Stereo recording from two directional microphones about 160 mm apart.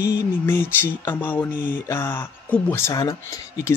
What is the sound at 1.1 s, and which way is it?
Speech, 10° left (ahead or behind).